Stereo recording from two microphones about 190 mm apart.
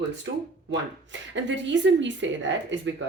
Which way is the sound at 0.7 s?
75° right (ahead or behind).